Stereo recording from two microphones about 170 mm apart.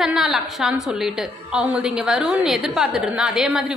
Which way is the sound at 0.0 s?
5° right (ahead or behind).